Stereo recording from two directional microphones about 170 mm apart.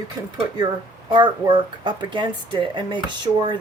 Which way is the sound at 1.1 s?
25° right (ahead or behind).